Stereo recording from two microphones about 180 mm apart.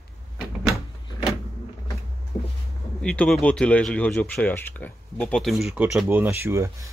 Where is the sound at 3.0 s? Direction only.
5° left (ahead or behind).